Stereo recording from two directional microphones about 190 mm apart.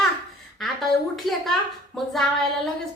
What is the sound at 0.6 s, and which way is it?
A woman's voice, centre (ahead or behind).